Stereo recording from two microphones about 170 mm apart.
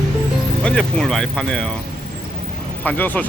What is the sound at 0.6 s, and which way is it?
Speech, 5° left (ahead or behind).